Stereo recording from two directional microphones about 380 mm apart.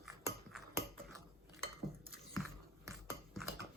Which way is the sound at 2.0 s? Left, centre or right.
Centre.